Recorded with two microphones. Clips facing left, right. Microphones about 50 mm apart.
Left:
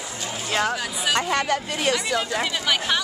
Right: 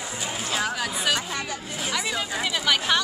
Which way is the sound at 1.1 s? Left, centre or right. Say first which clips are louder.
Left 7 dB; left.